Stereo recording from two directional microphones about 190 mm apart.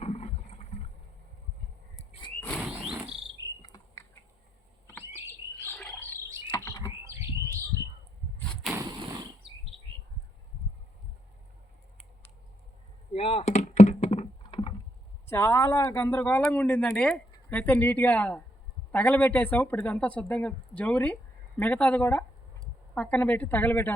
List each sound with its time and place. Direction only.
0.0 s boat: 35° left (ahead or behind)
2.6 s cricket: 5° right (ahead or behind)
3.6 s bird: 20° left (ahead or behind)
5.6 s a sound: 5° left (ahead or behind)
6.7 s typing: 15° left (ahead or behind)
7.0 s bird: 15° right (ahead or behind)
8.7 s a sound: 20° right (ahead or behind)
13.1 s computer keyboard: 30° left (ahead or behind)
15.3 s speech: 10° left (ahead or behind)